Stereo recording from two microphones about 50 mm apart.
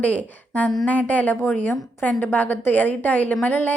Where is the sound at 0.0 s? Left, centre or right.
Left.